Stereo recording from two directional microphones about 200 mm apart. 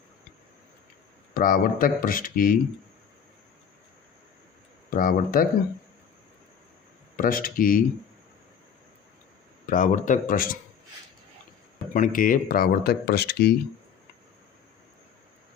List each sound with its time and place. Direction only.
1.3 s speech: 45° left (ahead or behind)
4.9 s speech: 45° left (ahead or behind)
7.2 s speech: 45° left (ahead or behind)
9.6 s speech: 40° left (ahead or behind)
11.9 s speech: 40° left (ahead or behind)